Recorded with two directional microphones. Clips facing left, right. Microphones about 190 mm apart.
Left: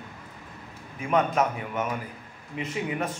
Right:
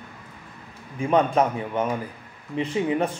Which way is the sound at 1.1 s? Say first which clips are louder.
Right 4 dB; 30° right (ahead or behind).